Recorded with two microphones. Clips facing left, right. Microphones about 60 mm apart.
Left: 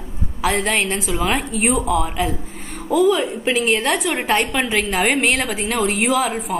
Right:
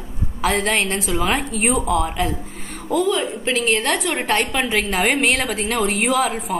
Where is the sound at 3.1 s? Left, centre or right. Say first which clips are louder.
Left 3 dB; centre.